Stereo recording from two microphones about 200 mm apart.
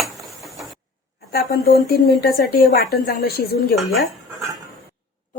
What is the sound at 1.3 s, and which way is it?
Speech, 50° left (ahead or behind).